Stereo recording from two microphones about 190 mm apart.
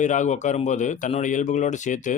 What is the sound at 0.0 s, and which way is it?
Speech, 40° left (ahead or behind).